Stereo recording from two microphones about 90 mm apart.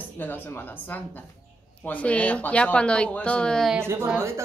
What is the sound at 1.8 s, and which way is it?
A woman's voice, 15° left (ahead or behind).